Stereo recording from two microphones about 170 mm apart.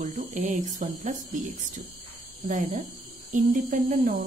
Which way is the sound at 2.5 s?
50° right (ahead or behind).